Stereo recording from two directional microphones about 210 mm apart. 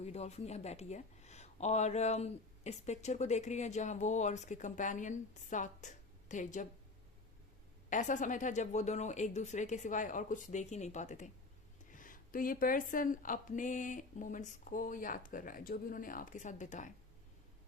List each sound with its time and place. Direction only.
0.0 s speech: 30° left (ahead or behind)
7.9 s speech: 35° left (ahead or behind)